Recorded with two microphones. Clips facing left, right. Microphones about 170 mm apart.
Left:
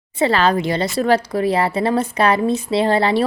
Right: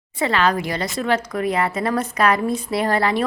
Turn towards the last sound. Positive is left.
turn(degrees=30)  # may be behind; listen again after turning